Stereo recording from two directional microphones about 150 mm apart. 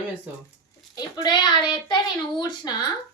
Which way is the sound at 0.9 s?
30° left (ahead or behind).